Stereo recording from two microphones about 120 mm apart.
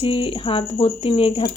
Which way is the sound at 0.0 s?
45° left (ahead or behind).